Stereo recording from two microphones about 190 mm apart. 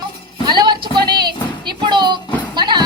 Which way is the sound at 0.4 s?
25° right (ahead or behind).